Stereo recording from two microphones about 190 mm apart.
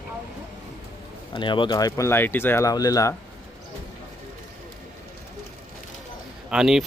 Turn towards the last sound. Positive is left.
turn(degrees=-5)  # may be behind; listen again after turning